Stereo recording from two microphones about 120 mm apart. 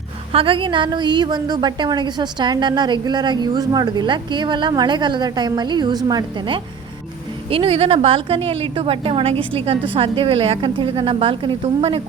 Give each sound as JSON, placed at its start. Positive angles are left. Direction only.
{"t": 0.3, "sound": "a woman's voice", "side_deg": -45}
{"t": 7.5, "sound": "a woman's voice", "side_deg": -50}